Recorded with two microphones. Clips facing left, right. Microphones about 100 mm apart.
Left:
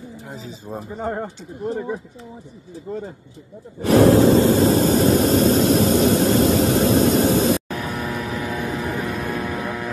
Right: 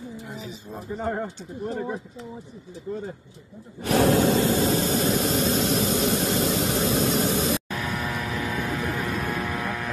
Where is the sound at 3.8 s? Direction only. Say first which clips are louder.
Left 7 dB; 35° left (ahead or behind).